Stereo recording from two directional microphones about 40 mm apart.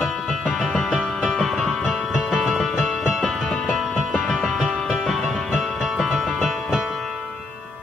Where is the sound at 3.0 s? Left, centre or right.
Centre.